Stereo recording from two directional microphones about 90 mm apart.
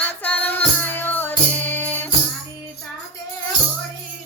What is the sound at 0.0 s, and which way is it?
Music, 20° left (ahead or behind).